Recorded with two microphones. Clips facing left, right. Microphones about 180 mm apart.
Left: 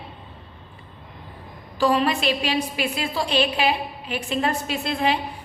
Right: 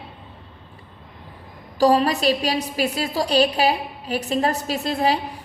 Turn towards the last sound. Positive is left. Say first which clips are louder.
# right 2 dB
turn(degrees=-35)  # may be behind; listen again after turning